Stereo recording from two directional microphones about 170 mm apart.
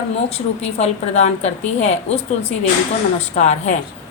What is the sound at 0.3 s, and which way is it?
A woman's voice, 40° left (ahead or behind).